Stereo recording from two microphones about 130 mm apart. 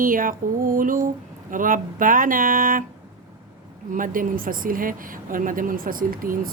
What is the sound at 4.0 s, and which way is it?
Speech, 90° right.